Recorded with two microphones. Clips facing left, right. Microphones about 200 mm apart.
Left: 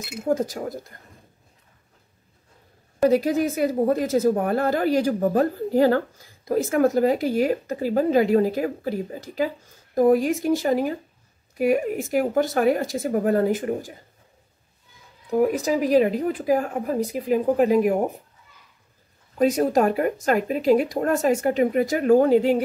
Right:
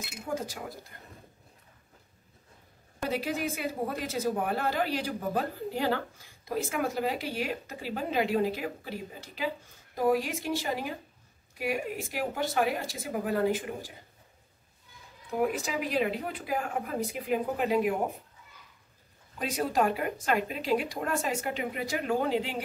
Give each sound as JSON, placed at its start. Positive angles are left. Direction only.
{"t": 0.2, "sound": "a woman's voice", "side_deg": 45}
{"t": 3.0, "sound": "a woman's voice", "side_deg": 40}
{"t": 15.4, "sound": "speech", "side_deg": 40}
{"t": 19.3, "sound": "a woman's voice", "side_deg": 45}